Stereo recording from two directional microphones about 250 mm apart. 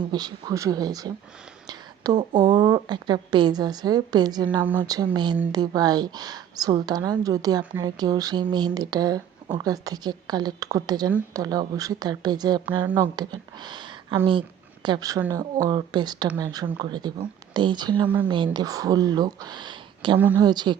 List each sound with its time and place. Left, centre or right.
0.1 s a woman's voice: centre
1.6 s a sound: centre
2.4 s a woman's voice: centre
20.1 s a woman's voice: centre